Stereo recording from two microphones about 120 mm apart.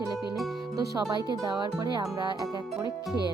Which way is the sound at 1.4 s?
35° right (ahead or behind).